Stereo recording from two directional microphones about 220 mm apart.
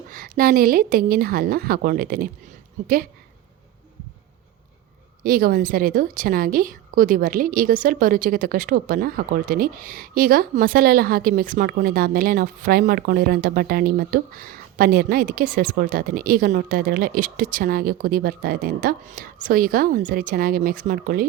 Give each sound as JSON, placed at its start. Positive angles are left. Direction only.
{"t": 0.1, "sound": "a woman's voice", "side_deg": -40}
{"t": 5.2, "sound": "a woman's voice", "side_deg": -40}